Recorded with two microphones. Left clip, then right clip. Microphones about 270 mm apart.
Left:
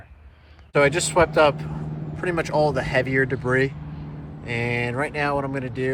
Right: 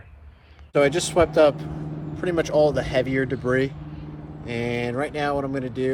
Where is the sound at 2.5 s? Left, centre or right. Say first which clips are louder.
Right 2 dB; right.